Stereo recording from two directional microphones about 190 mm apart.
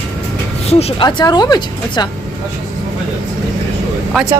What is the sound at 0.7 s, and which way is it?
Speech, 35° left (ahead or behind).